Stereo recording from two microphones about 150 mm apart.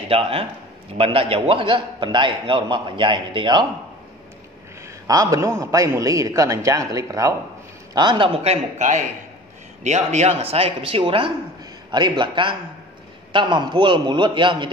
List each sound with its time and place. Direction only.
0.1 s a man's voice: 40° right (ahead or behind)
5.0 s a man's voice: 25° right (ahead or behind)
8.5 s a man's voice: 50° right (ahead or behind); by 14.7 s 30° right (ahead or behind)